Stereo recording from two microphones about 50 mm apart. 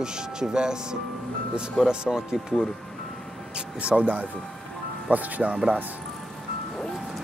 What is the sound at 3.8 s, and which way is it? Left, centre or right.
Speech, right.